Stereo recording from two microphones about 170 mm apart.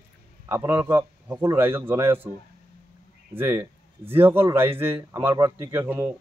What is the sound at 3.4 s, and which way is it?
Speech, 15° right (ahead or behind).